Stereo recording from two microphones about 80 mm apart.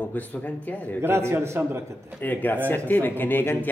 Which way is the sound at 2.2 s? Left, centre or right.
Left.